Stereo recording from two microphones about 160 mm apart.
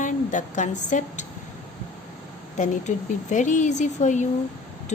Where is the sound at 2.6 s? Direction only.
50° left (ahead or behind).